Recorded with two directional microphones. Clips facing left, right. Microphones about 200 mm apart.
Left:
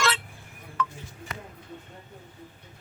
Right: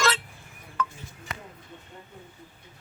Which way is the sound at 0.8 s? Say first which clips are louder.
Even; 45° right (ahead or behind).